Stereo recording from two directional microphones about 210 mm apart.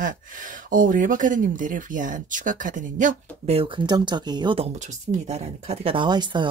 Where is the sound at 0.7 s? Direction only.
40° right (ahead or behind); by 4.6 s 20° right (ahead or behind).